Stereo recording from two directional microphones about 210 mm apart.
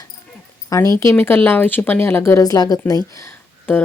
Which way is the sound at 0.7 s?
15° left (ahead or behind).